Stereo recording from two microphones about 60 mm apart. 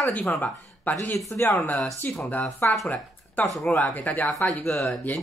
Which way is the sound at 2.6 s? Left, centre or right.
Left.